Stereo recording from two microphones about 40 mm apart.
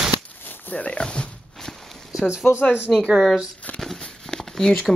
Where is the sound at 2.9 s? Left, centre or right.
Centre.